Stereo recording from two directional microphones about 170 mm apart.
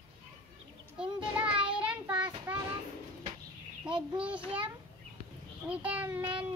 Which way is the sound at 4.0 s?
5° right (ahead or behind).